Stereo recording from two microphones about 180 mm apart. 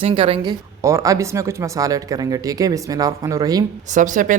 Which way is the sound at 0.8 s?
15° right (ahead or behind).